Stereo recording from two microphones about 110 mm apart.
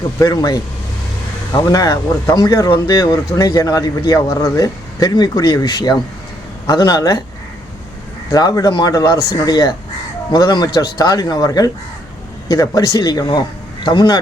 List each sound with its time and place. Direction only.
0.2 s speech: 35° left (ahead or behind)
1.6 s speech: 30° left (ahead or behind)
8.3 s speech: 35° left (ahead or behind)